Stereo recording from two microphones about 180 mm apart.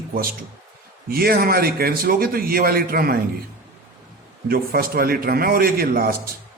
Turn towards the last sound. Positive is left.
turn(degrees=-55)  # may be behind; listen again after turning